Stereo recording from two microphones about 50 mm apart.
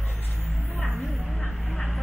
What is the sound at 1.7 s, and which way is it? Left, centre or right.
Vehicle, centre.